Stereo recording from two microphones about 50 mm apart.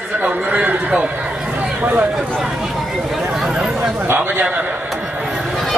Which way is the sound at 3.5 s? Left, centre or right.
Centre.